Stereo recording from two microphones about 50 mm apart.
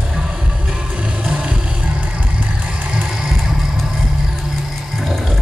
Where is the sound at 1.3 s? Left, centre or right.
Centre.